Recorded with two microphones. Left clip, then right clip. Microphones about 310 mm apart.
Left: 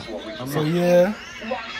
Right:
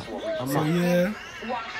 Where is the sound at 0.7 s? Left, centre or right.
Centre.